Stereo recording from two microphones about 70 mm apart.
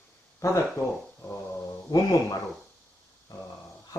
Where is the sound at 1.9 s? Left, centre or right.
Left.